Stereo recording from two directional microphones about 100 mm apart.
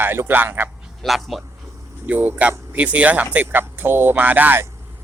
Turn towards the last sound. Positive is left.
turn(degrees=-20)  # may be behind; listen again after turning